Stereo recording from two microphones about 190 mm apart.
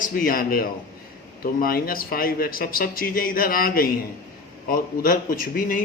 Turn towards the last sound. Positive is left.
turn(degrees=50)  # may be behind; listen again after turning